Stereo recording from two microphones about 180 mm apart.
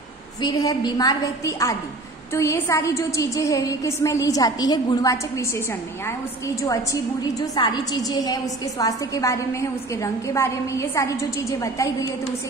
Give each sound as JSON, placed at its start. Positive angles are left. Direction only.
{"t": 0.4, "sound": "a woman's voice", "side_deg": 20}
{"t": 6.6, "sound": "a woman's voice", "side_deg": 20}